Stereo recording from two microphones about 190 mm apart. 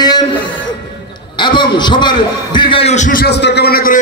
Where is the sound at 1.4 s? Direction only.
25° left (ahead or behind); by 4.0 s 50° left (ahead or behind).